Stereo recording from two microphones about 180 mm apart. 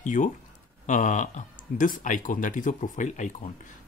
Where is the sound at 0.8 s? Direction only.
45° left (ahead or behind).